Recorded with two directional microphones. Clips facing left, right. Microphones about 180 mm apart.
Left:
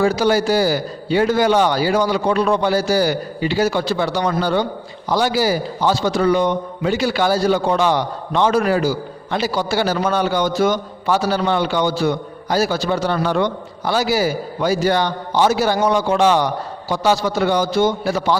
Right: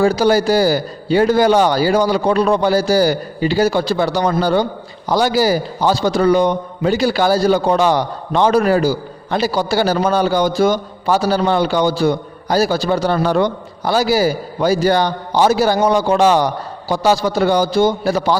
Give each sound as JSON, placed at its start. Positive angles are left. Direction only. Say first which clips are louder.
{"t": 0.0, "sound": "a man's voice", "louder": "right 3 dB", "side_deg": -35}